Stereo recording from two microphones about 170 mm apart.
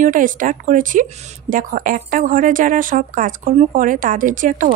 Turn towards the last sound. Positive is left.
turn(degrees=-50)  # may be behind; listen again after turning